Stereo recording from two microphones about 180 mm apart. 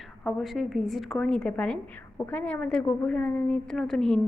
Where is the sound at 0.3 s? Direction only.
Centre (ahead or behind).